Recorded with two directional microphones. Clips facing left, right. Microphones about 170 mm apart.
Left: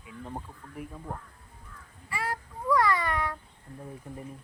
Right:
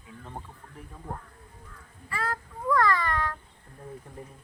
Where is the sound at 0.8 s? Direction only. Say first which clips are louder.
Left 8 dB; 10° left (ahead or behind).